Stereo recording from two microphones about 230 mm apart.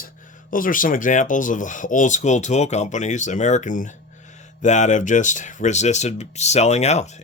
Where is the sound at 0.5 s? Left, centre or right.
Left.